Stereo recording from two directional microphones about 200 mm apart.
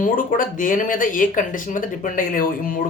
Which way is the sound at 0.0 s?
45° left (ahead or behind).